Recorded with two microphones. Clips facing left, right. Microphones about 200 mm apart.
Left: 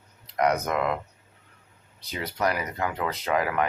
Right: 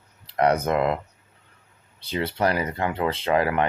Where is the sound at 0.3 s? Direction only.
30° right (ahead or behind).